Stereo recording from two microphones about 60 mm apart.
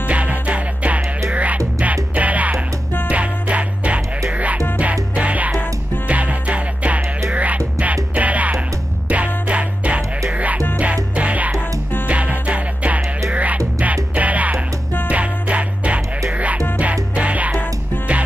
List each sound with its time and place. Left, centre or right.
0.1 s music: right
5.1 s music: right